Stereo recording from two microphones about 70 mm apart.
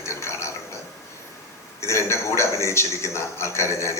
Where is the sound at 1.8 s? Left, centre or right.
Left.